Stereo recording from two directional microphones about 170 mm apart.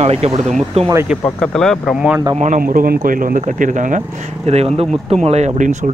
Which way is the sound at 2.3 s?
45° right (ahead or behind).